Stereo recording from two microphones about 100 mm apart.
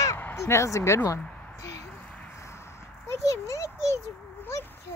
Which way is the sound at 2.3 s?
25° left (ahead or behind).